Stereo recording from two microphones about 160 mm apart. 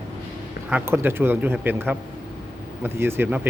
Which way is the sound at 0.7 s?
10° right (ahead or behind).